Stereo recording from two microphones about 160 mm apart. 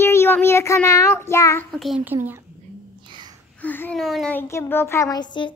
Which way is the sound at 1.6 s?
Centre (ahead or behind).